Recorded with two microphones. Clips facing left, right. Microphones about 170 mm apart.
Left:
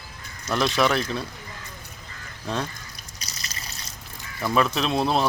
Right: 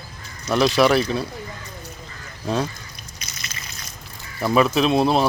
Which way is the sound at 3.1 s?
35° left (ahead or behind).